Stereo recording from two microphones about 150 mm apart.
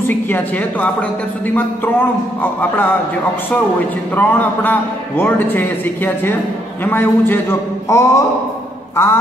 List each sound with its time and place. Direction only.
0.0 s a man's voice: 10° left (ahead or behind)
4.2 s a man's voice: 10° left (ahead or behind)
8.9 s a sound: 15° left (ahead or behind)